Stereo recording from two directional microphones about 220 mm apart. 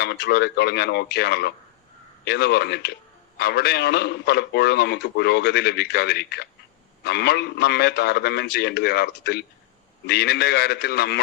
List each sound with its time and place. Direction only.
0.0 s a man's voice: 50° left (ahead or behind)